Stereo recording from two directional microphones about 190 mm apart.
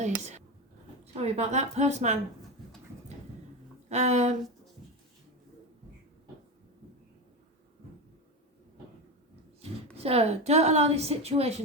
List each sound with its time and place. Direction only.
0.0 s a woman's voice: 40° right (ahead or behind)
3.8 s a woman's voice: 35° right (ahead or behind)
9.6 s a woman's voice: 30° right (ahead or behind)